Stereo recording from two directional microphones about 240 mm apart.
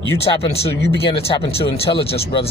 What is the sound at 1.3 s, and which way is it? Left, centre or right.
Speech, left.